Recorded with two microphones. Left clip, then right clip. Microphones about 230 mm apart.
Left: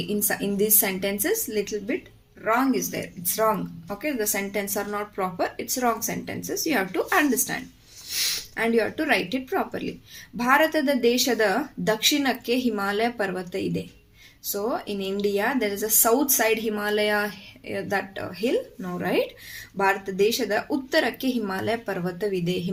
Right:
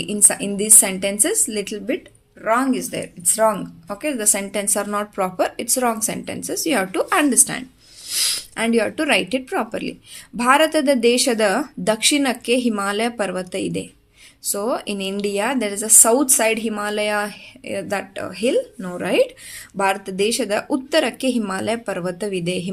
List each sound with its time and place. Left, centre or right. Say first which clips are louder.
0.1 s a woman's voice: right 5 dB; right